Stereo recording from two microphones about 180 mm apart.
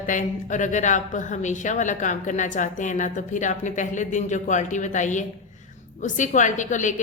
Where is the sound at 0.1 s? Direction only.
45° left (ahead or behind).